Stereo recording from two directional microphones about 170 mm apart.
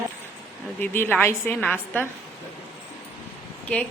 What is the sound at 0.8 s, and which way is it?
A woman's voice, 10° left (ahead or behind).